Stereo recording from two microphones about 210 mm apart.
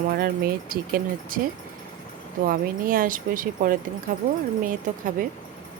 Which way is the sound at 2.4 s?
40° right (ahead or behind).